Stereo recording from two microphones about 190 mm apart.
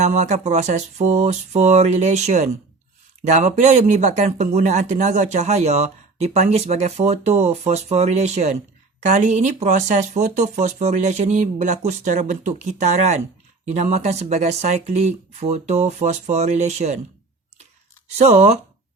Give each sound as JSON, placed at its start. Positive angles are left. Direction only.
{"t": 0.0, "sound": "speech", "side_deg": -40}
{"t": 18.2, "sound": "speech", "side_deg": -35}